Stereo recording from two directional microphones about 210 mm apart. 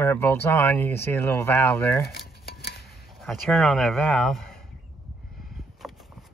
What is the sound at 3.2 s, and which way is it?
Speech, centre (ahead or behind).